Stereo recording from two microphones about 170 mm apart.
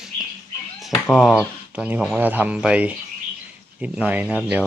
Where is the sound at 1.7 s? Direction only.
5° right (ahead or behind).